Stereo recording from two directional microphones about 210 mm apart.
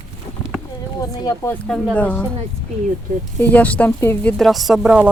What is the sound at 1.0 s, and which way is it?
Speech, 15° left (ahead or behind).